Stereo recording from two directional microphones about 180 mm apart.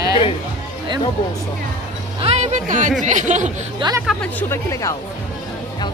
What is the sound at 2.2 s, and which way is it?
Speech, 40° right (ahead or behind).